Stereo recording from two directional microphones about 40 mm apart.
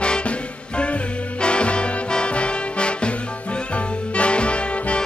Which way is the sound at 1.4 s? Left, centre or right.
Left.